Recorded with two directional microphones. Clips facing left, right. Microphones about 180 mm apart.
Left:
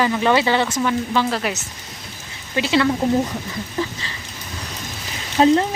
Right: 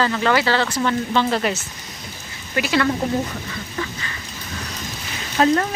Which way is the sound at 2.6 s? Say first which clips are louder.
Left 2 dB; 25° left (ahead or behind).